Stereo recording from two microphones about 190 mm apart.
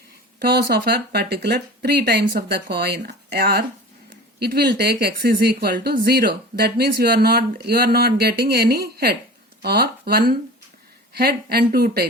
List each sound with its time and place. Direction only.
0.3 s speech: 55° right (ahead or behind)